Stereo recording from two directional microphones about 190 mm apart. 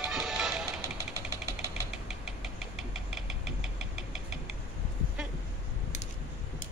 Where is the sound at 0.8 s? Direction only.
20° left (ahead or behind).